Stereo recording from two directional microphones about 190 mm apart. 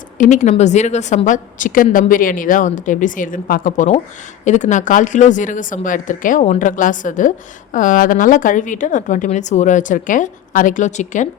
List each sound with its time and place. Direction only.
0.2 s a woman's voice: 40° left (ahead or behind)